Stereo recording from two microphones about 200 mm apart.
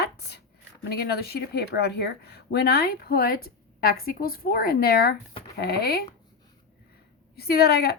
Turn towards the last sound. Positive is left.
turn(degrees=50)  # may be behind; listen again after turning